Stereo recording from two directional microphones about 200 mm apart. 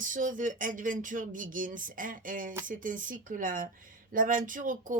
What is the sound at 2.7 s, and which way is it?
Speech, 40° right (ahead or behind).